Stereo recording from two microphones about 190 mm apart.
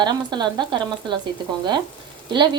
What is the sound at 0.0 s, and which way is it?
Speech, 25° right (ahead or behind).